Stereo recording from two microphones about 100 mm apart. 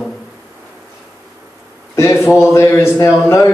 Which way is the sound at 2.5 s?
25° left (ahead or behind).